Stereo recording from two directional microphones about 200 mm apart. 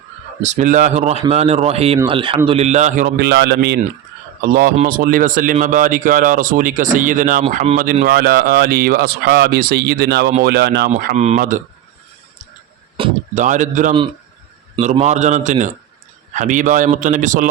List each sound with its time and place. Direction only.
0.4 s a man's voice: 35° right (ahead or behind)
3.2 s a man's voice: 55° right (ahead or behind)
4.4 s a man's voice: 45° right (ahead or behind)
10.8 s a man's voice: 40° right (ahead or behind)
13.0 s a sound: 25° right (ahead or behind)
13.3 s a man's voice: 40° right (ahead or behind)